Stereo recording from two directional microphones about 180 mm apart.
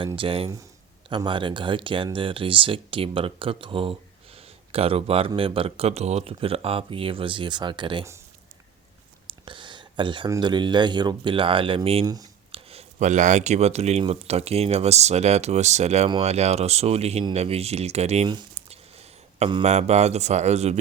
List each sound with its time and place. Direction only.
0.2 s speech: 30° right (ahead or behind)
9.2 s speech: 25° right (ahead or behind)
12.0 s speech: 20° right (ahead or behind)
12.5 s speech: 40° right (ahead or behind)